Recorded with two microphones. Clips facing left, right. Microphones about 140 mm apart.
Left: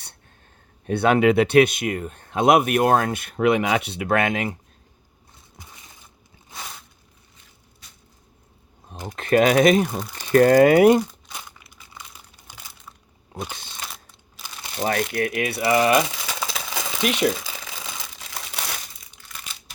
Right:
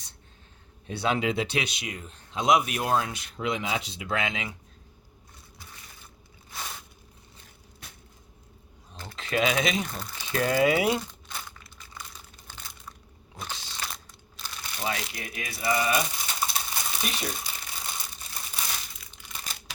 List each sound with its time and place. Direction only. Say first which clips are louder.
0.9 s speech: left 10 dB; 60° left (ahead or behind)
9.1 s speech: left 9 dB; 50° left (ahead or behind)
11.3 s crumpling: left 1 dB; 15° left (ahead or behind)
14.4 s crumpling: left 1 dB; 5° left (ahead or behind)
14.8 s speech: left 10 dB; 55° left (ahead or behind); by 17.4 s 85° left
17.9 s crumpling: left 4 dB; 90° left
19.5 s crumpling: right 3 dB; 40° right (ahead or behind)